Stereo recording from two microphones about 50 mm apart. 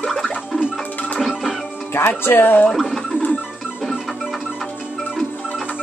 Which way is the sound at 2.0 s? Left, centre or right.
Left.